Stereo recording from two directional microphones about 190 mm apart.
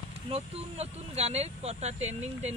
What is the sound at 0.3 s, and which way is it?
Speech, 35° right (ahead or behind).